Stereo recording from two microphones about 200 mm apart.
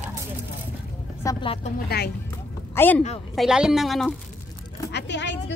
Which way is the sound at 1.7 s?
55° left (ahead or behind).